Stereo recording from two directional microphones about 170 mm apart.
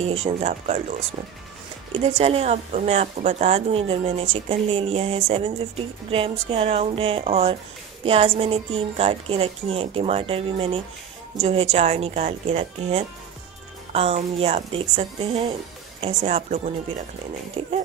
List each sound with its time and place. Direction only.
0.0 s speech: 40° right (ahead or behind)
1.9 s speech: 35° right (ahead or behind)